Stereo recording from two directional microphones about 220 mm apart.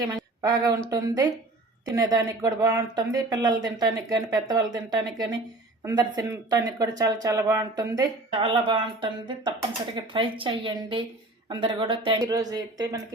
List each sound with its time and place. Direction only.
0.0 s speech: 15° right (ahead or behind)